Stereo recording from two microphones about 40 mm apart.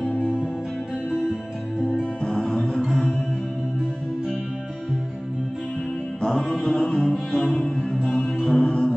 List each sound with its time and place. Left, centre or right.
2.2 s music: centre
6.2 s music: centre